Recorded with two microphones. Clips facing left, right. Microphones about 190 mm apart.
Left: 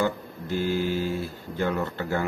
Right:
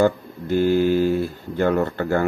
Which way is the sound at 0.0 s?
55° right (ahead or behind).